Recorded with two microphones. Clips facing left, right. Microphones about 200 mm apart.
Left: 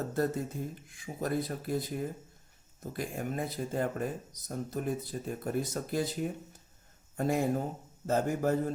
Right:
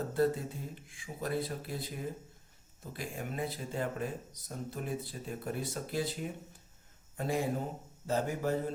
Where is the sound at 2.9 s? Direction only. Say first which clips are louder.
Left 3 dB; 45° left (ahead or behind).